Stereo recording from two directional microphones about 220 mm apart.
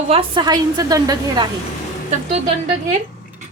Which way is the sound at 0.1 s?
25° right (ahead or behind).